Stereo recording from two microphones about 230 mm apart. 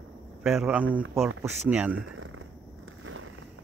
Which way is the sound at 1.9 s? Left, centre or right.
Right.